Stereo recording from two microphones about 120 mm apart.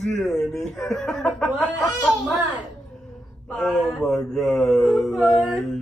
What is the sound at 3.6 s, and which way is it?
Speech, 10° left (ahead or behind).